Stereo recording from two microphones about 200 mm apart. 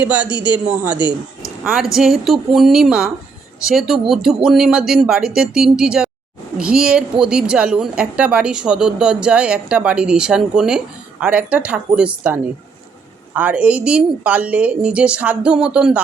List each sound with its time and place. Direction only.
0.3 s a man's voice: 20° left (ahead or behind)
0.5 s a woman's voice: 5° right (ahead or behind)
0.9 s speech: 25° left (ahead or behind)
1.6 s a woman's voice: centre (ahead or behind)